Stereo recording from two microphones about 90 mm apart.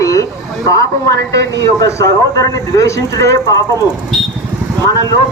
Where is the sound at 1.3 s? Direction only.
35° left (ahead or behind).